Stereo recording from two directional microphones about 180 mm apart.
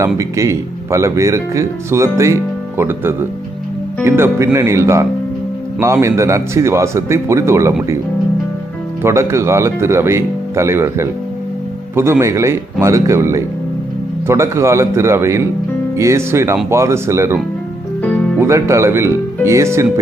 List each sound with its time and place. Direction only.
0.2 s speech: 15° right (ahead or behind)
9.0 s speech: 15° right (ahead or behind)
18.0 s music: 5° left (ahead or behind)
18.3 s speech: 15° right (ahead or behind)